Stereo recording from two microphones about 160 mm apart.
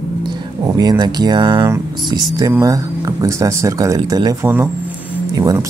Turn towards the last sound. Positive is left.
turn(degrees=-20)  # may be behind; listen again after turning